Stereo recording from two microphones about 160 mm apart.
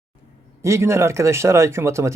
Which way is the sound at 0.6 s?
15° right (ahead or behind).